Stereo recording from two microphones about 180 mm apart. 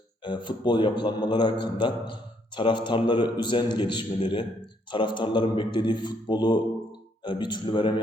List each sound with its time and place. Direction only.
0.3 s speech: 25° left (ahead or behind)